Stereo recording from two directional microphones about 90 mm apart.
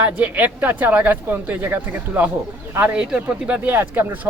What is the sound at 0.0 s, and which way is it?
Speech, 15° right (ahead or behind).